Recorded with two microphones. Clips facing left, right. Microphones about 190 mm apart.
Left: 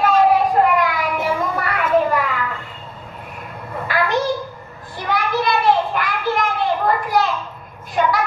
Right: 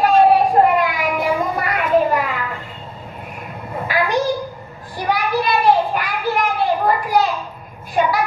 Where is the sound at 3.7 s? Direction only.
15° right (ahead or behind).